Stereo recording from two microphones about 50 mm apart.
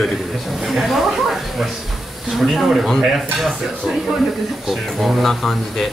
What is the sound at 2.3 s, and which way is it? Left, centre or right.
Speech, centre.